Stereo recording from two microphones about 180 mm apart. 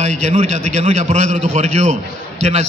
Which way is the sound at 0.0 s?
40° right (ahead or behind).